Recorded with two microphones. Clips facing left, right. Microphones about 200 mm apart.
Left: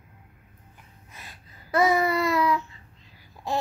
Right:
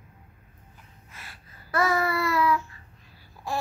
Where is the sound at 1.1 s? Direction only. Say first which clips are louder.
Left 1 dB; 15° left (ahead or behind).